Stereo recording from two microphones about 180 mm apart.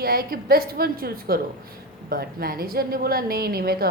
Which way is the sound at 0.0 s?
55° right (ahead or behind).